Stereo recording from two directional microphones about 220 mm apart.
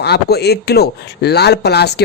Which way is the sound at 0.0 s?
50° left (ahead or behind).